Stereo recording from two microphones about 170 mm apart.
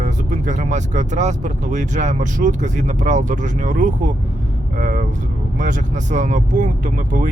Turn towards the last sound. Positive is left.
turn(degrees=-50)  # may be behind; listen again after turning